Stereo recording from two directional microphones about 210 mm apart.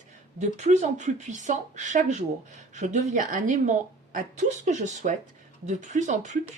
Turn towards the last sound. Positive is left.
turn(degrees=-35)  # may be behind; listen again after turning